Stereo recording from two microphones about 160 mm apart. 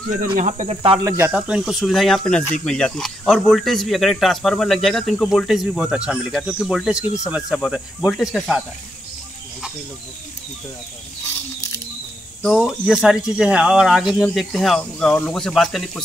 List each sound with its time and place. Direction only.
0.4 s speech: 50° right (ahead or behind)
1.0 s speech: 15° right (ahead or behind)
1.3 s speech: 5° right (ahead or behind)
12.5 s speech: 5° right (ahead or behind)